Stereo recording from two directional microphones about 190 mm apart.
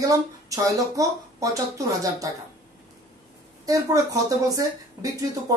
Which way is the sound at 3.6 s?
15° right (ahead or behind).